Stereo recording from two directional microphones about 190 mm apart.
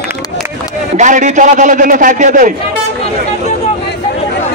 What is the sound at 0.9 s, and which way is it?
A man's voice, 40° right (ahead or behind).